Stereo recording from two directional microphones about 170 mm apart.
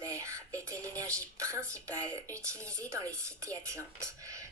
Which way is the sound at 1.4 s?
20° right (ahead or behind).